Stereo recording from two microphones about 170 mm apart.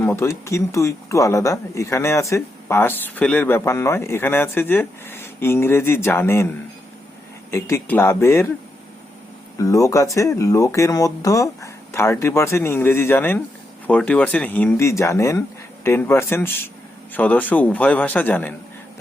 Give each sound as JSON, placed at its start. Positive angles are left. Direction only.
{"t": 0.0, "sound": "speech", "side_deg": 15}
{"t": 7.5, "sound": "speech", "side_deg": 15}
{"t": 9.6, "sound": "speech", "side_deg": 20}